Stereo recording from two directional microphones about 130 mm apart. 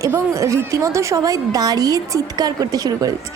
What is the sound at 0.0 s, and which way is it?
A woman's voice, 25° right (ahead or behind).